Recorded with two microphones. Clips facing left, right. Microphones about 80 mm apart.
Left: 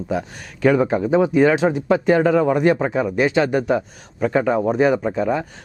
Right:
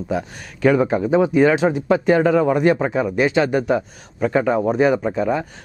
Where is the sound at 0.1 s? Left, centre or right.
Centre.